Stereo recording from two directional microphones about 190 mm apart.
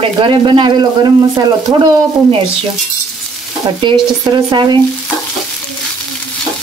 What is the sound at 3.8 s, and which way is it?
Speech, 25° right (ahead or behind).